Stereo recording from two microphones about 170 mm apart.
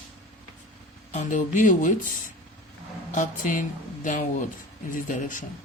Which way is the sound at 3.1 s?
50° left (ahead or behind).